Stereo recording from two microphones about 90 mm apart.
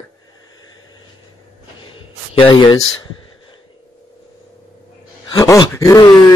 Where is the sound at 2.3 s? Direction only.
70° left (ahead or behind).